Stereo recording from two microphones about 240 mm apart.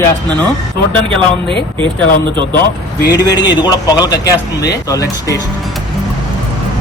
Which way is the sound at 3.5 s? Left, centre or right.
Centre.